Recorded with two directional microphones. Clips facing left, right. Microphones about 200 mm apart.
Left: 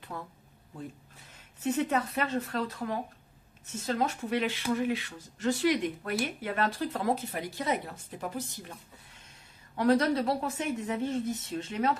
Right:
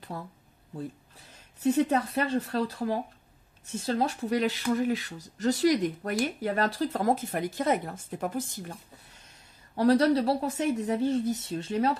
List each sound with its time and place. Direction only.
0.1 s speech: 35° right (ahead or behind)
1.6 s speech: 35° right (ahead or behind)
9.8 s speech: 35° right (ahead or behind)